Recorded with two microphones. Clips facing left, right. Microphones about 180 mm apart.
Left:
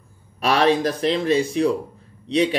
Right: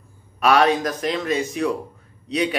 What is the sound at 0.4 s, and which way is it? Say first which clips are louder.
A man's voice: right 1 dB; 30° left (ahead or behind).